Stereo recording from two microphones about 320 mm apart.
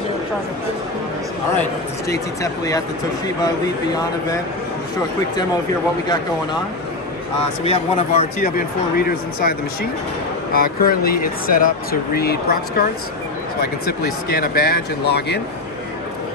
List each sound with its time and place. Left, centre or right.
2.4 s speech: centre
7.6 s speech: centre